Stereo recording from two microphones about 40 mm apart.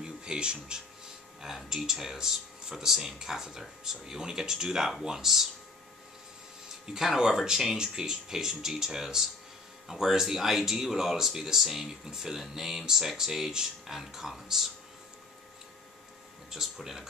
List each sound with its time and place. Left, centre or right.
0.0 s speech: right
6.9 s speech: centre
16.4 s speech: centre